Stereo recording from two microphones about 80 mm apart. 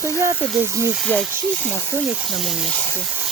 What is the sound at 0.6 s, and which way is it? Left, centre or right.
Speech, right.